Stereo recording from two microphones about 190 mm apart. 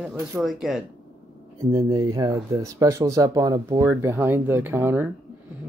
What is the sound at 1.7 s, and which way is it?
Speech, 20° right (ahead or behind).